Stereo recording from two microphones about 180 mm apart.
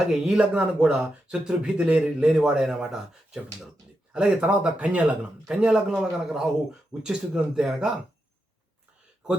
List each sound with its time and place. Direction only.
0.0 s speech: 5° right (ahead or behind)